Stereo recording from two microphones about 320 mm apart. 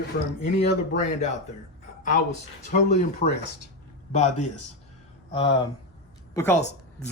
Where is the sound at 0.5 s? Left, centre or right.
Left.